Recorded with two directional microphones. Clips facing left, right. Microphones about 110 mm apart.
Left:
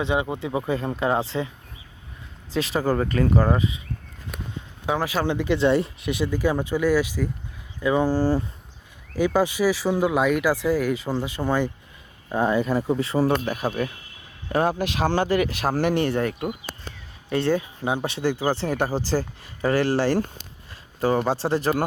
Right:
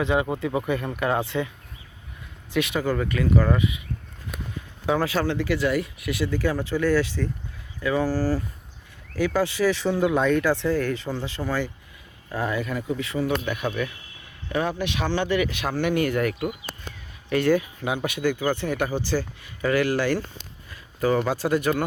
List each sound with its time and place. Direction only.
0.0 s speech: 20° left (ahead or behind)
2.5 s speech: 30° left (ahead or behind)
4.5 s speech: 15° left (ahead or behind); by 20.1 s 35° left (ahead or behind)
21.2 s speech: 30° left (ahead or behind)